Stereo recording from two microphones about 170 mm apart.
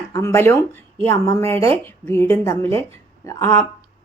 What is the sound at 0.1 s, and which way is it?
A woman's voice, 15° left (ahead or behind).